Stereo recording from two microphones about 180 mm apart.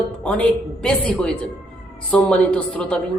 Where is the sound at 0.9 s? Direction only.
5° left (ahead or behind).